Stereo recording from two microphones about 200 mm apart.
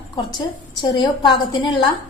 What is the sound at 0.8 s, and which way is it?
A woman's voice, 25° left (ahead or behind).